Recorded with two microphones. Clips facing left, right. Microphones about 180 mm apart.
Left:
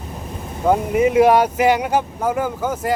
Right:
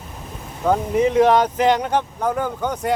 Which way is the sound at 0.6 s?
10° left (ahead or behind).